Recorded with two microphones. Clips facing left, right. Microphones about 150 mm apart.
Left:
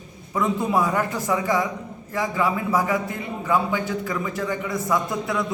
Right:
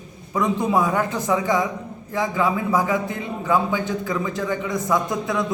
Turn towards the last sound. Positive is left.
turn(degrees=-20)  # may be behind; listen again after turning